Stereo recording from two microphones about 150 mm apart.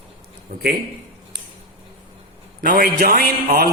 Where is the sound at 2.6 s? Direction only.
80° right.